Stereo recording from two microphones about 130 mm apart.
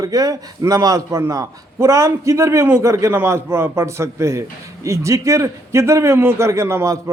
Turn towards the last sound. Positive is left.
turn(degrees=-20)  # may be behind; listen again after turning